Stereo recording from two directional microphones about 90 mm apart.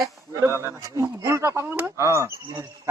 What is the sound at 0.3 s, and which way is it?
Speech, 30° right (ahead or behind).